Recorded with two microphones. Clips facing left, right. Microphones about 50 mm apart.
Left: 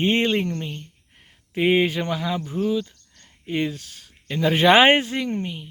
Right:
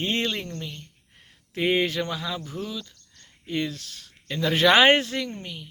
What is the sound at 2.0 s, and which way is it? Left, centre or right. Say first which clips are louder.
Speech: left 5 dB; left.